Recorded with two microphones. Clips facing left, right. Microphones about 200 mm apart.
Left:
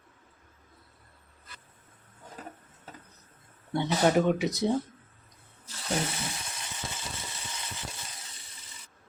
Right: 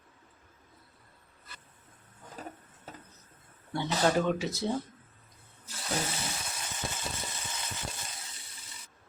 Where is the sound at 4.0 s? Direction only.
10° left (ahead or behind).